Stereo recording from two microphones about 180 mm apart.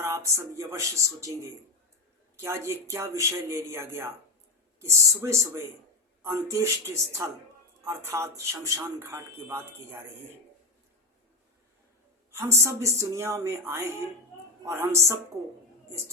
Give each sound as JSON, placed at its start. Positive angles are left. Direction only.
{"t": 0.0, "sound": "speech", "side_deg": -15}
{"t": 12.3, "sound": "speech", "side_deg": -15}